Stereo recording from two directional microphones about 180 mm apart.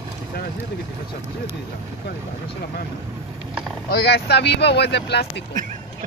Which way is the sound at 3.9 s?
65° left (ahead or behind).